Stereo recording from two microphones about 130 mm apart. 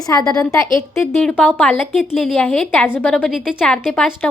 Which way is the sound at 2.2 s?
Centre (ahead or behind).